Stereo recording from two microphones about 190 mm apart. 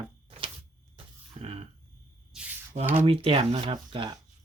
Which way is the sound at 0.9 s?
30° right (ahead or behind).